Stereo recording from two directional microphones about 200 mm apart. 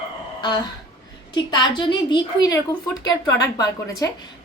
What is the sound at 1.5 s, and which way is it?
A woman's voice, 25° left (ahead or behind).